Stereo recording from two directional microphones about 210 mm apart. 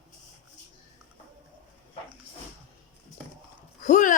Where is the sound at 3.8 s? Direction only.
35° left (ahead or behind).